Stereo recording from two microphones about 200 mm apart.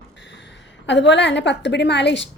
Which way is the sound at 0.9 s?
60° left (ahead or behind).